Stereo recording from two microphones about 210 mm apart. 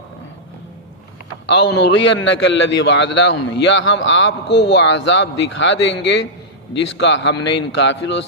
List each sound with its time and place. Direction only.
1.5 s a man's voice: 55° left (ahead or behind)